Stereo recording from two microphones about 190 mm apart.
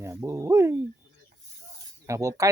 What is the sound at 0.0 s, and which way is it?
Speech, 15° right (ahead or behind).